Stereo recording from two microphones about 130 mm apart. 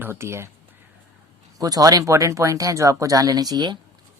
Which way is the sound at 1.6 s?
25° right (ahead or behind).